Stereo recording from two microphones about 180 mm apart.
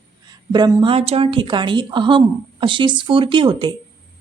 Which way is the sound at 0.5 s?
25° right (ahead or behind).